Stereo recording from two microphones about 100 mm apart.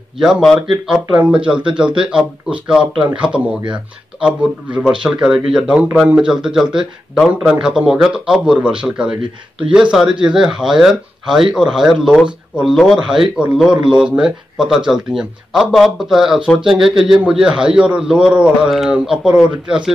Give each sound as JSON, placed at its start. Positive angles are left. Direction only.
{"t": 0.2, "sound": "speech", "side_deg": 0}